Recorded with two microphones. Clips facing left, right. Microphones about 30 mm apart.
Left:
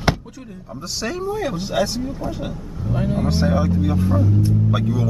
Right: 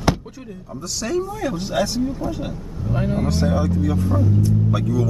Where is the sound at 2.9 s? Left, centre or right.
Centre.